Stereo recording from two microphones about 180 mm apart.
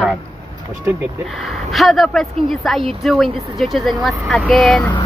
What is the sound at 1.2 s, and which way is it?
A woman's voice, centre (ahead or behind).